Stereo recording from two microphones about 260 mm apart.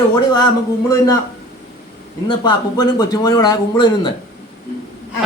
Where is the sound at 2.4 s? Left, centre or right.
Centre.